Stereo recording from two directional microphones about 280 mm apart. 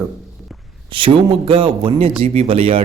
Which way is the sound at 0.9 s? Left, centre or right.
Centre.